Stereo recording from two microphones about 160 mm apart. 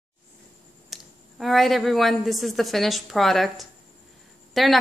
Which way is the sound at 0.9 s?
Centre (ahead or behind).